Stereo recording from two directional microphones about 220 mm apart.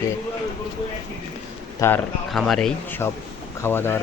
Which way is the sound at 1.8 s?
15° left (ahead or behind).